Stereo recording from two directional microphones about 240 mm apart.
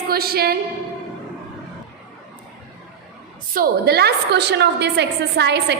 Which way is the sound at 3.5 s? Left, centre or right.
Right.